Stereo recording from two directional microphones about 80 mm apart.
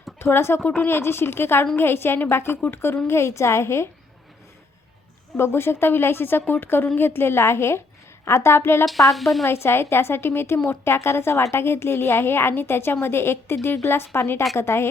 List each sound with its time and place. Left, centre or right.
0.2 s a woman's voice: left
5.4 s a woman's voice: left
9.1 s speech: centre
9.4 s a woman's voice: left